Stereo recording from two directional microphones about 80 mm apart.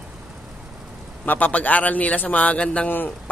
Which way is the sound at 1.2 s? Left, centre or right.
Centre.